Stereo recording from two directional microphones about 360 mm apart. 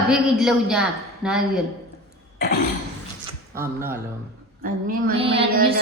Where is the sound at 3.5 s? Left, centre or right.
Centre.